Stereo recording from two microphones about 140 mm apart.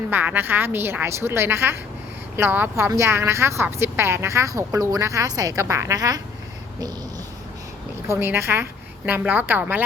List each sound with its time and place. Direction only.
0.1 s a woman's voice: 15° right (ahead or behind)
8.0 s a woman's voice: 20° right (ahead or behind)